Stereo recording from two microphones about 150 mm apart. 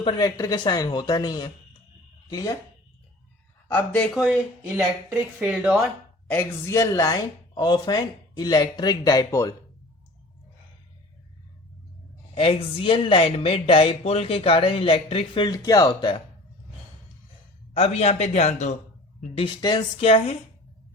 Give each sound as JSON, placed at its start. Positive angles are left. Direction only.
{"t": 0.0, "sound": "speech", "side_deg": 30}
{"t": 3.7, "sound": "speech", "side_deg": 10}
{"t": 4.1, "sound": "speech", "side_deg": -5}
{"t": 5.4, "sound": "speech", "side_deg": -5}
{"t": 6.2, "sound": "speech", "side_deg": 10}
{"t": 6.7, "sound": "speech", "side_deg": 20}
{"t": 12.3, "sound": "speech", "side_deg": 40}
{"t": 15.4, "sound": "speech", "side_deg": 25}
{"t": 17.7, "sound": "a man's voice", "side_deg": 45}
{"t": 19.3, "sound": "speech", "side_deg": 35}